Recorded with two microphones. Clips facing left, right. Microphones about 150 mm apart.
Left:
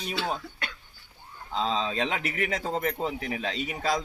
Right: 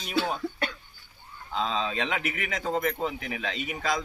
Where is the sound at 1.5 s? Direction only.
35° left (ahead or behind).